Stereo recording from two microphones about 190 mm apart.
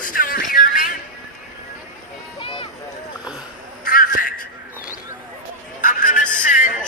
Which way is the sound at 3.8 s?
45° left (ahead or behind).